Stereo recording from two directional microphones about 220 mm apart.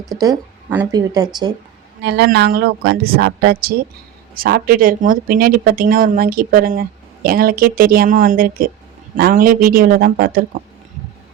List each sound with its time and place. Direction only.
0.2 s speech: 10° right (ahead or behind)
2.0 s speech: 50° right (ahead or behind)